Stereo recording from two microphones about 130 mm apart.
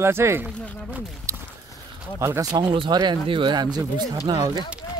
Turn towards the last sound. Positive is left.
turn(degrees=-30)  # may be behind; listen again after turning